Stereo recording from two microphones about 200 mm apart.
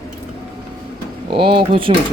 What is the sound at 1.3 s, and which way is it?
Speech, 25° right (ahead or behind).